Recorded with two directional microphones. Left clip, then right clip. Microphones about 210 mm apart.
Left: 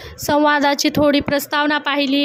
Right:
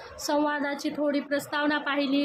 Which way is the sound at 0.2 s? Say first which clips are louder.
Left 12 dB; 35° left (ahead or behind).